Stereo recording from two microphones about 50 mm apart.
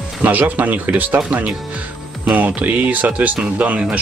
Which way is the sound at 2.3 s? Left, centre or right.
Right.